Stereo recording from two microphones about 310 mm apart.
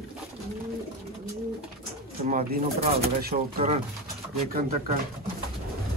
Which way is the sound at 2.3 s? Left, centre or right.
Right.